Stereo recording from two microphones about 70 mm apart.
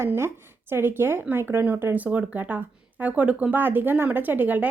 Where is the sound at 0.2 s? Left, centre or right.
Right.